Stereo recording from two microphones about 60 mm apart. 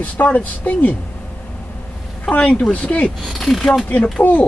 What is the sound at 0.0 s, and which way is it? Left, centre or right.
Speech, left.